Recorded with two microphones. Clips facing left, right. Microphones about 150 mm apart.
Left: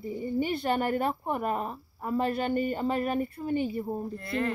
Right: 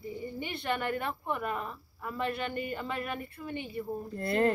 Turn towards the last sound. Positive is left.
turn(degrees=-40)  # may be behind; listen again after turning